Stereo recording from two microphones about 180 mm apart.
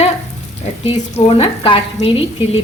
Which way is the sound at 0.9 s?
35° left (ahead or behind).